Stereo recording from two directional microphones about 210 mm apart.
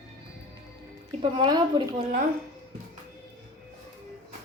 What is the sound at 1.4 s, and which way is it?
Speech, 20° right (ahead or behind).